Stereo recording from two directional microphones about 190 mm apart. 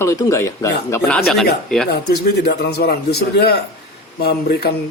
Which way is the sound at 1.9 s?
60° left (ahead or behind).